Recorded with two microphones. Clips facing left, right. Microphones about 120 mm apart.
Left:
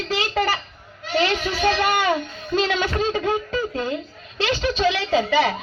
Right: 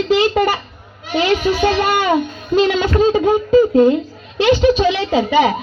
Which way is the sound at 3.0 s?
15° right (ahead or behind).